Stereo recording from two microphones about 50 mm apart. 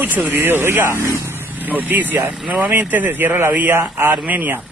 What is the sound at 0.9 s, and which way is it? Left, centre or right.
Speech, right.